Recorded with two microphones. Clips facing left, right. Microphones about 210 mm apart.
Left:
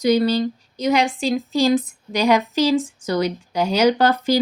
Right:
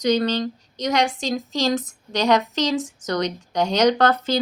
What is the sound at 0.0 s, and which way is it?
Speech, 10° left (ahead or behind).